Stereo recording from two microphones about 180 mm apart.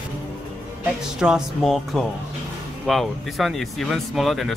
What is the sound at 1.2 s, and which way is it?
Speech, centre (ahead or behind).